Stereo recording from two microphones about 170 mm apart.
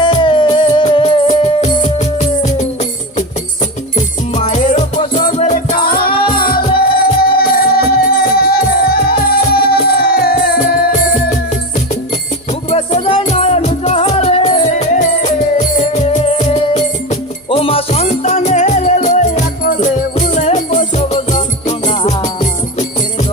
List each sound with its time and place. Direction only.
0.0 s music: 30° left (ahead or behind); by 2.6 s 45° left (ahead or behind)
4.5 s music: 40° left (ahead or behind)
5.5 s music: 60° left (ahead or behind)
10.6 s music: 45° left (ahead or behind)
12.7 s music: 35° left (ahead or behind)